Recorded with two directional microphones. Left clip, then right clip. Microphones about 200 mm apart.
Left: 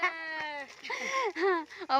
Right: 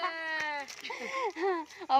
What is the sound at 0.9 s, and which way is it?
Speech, 25° left (ahead or behind).